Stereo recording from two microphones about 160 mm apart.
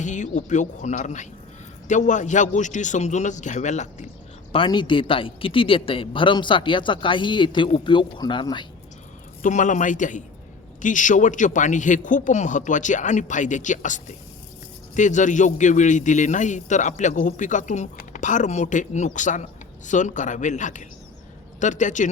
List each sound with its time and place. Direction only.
0.0 s a man's voice: 50° left (ahead or behind)
4.5 s a man's voice: 30° left (ahead or behind)
9.4 s a man's voice: 50° left (ahead or behind)